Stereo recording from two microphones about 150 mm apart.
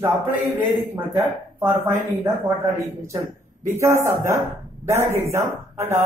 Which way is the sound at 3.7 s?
20° right (ahead or behind).